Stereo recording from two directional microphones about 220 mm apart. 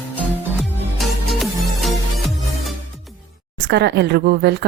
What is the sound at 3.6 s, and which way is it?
Speech, 50° right (ahead or behind).